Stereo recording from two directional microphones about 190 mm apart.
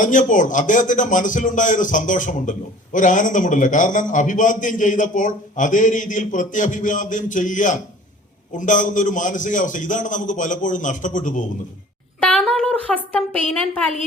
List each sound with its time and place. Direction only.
0.0 s a man's voice: 40° left (ahead or behind)
12.2 s speech: 5° left (ahead or behind)